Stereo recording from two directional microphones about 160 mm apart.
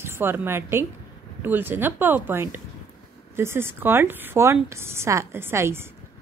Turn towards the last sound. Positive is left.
turn(degrees=-15)  # may be behind; listen again after turning